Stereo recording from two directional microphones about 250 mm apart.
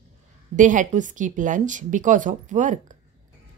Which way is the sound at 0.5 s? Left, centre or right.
Right.